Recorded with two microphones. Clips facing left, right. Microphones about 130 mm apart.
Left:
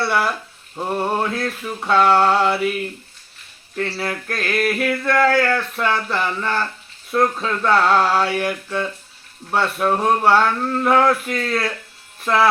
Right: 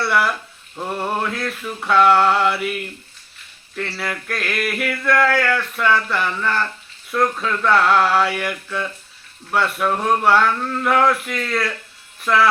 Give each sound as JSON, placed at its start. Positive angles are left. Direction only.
{"t": 0.0, "sound": "speech", "side_deg": 30}
{"t": 0.8, "sound": "music", "side_deg": 15}
{"t": 1.2, "sound": "speech", "side_deg": 30}
{"t": 3.8, "sound": "a sound", "side_deg": 30}
{"t": 7.1, "sound": "speech", "side_deg": 30}